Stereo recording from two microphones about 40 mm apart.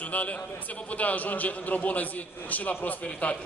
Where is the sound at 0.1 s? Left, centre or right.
Left.